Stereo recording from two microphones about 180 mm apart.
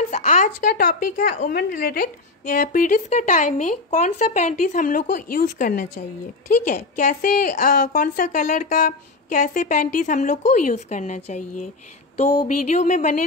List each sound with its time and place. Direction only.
0.1 s a woman's voice: 40° left (ahead or behind)